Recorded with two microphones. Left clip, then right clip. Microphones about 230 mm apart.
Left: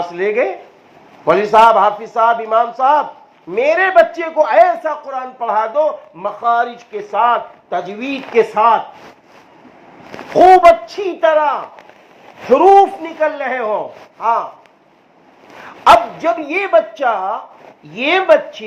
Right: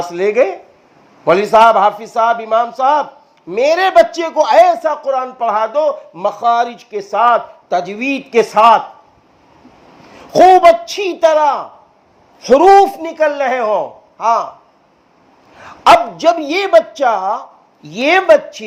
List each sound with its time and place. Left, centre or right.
0.0 s speech: right
10.3 s speech: right
15.6 s speech: right